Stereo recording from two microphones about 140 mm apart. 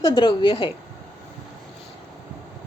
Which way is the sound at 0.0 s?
35° left (ahead or behind).